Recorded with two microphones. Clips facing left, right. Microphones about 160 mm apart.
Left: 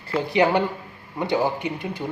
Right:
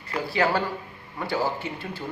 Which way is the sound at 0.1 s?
20° left (ahead or behind).